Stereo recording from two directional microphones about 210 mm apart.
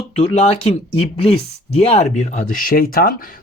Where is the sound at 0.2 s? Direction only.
30° left (ahead or behind).